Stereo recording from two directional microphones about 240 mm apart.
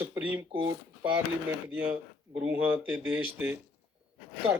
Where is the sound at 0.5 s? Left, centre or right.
Right.